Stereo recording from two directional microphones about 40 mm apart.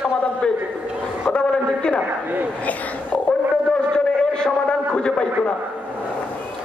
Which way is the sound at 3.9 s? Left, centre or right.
Left.